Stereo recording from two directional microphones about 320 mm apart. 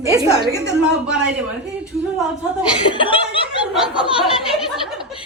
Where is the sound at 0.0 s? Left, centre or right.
Centre.